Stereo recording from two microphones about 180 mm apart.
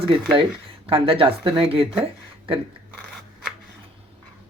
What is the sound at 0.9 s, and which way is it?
Speech, 30° right (ahead or behind).